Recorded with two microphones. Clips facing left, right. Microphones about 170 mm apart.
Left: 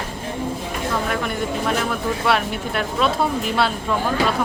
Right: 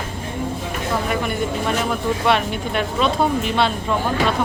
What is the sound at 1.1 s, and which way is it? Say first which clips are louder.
Speech: right 1 dB; centre (ahead or behind).